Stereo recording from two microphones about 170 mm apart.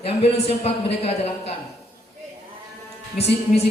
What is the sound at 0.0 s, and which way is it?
Speech, 35° left (ahead or behind).